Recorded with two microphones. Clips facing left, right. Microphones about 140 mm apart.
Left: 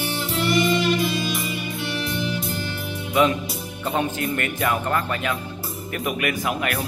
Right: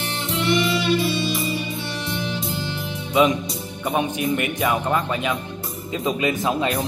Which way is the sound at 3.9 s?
15° right (ahead or behind).